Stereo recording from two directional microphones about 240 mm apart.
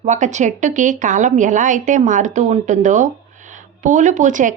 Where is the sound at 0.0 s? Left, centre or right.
Right.